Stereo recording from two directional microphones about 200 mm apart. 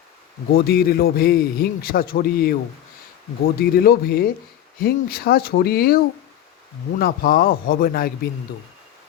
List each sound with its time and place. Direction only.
0.5 s a man's voice: 50° left (ahead or behind)
7.0 s a man's voice: 45° left (ahead or behind)